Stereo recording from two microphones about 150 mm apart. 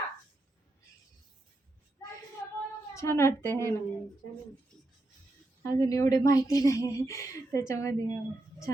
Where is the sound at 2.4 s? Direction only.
20° left (ahead or behind).